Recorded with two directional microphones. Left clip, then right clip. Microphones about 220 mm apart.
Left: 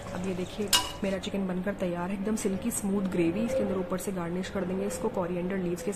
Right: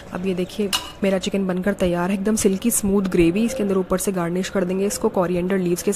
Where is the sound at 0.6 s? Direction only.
35° right (ahead or behind).